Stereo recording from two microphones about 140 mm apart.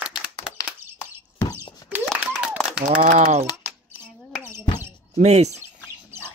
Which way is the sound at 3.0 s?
70° right (ahead or behind).